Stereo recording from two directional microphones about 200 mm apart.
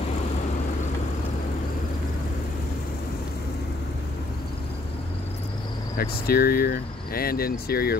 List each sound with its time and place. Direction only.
5.9 s speech: 50° left (ahead or behind)